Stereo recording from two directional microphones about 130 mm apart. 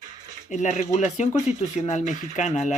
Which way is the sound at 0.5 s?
65° left (ahead or behind).